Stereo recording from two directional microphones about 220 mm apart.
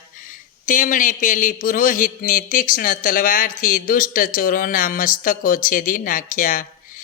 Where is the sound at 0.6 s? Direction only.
35° left (ahead or behind).